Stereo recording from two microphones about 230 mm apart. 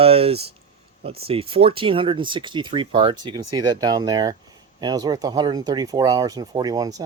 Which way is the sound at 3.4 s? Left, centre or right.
Right.